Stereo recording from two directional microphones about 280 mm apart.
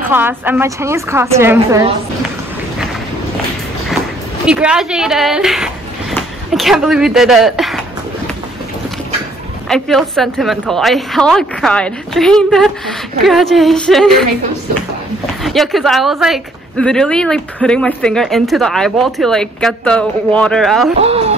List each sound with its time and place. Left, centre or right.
0.1 s a woman's voice: centre
4.5 s speech: centre
9.7 s speech: centre
15.4 s speech: centre
21.0 s speech: right